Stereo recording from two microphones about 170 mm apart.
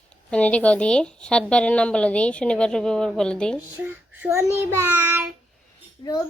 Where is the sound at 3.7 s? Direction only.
10° right (ahead or behind).